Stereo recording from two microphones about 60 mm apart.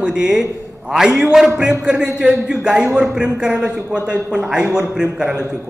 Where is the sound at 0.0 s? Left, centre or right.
Centre.